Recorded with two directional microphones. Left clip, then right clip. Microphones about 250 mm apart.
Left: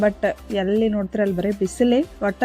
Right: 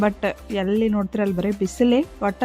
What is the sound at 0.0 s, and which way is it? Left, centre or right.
Speech, centre.